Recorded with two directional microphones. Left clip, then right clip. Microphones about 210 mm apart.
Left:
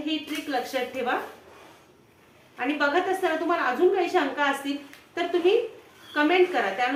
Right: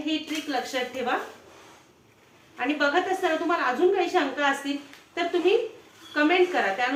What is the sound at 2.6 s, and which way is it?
A woman's voice, 5° right (ahead or behind).